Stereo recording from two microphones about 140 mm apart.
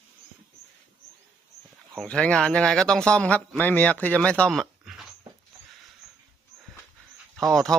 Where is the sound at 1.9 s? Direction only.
5° left (ahead or behind).